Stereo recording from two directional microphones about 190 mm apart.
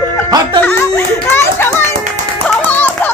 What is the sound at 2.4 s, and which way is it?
Music, 10° left (ahead or behind).